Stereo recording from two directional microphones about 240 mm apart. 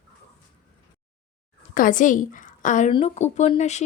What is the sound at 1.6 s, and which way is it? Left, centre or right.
A woman's voice, left.